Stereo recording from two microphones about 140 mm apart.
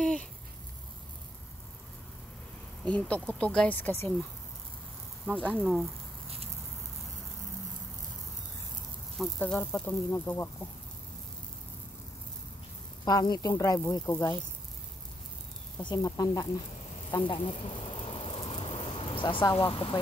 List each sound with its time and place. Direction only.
0.0 s a sound: 5° left (ahead or behind)
2.8 s speech: 10° left (ahead or behind)
5.2 s speech: 10° left (ahead or behind)
9.2 s speech: 10° left (ahead or behind)
13.0 s a woman's voice: 30° left (ahead or behind)
15.8 s a woman's voice: 30° left (ahead or behind)
17.9 s a sound: 45° left (ahead or behind)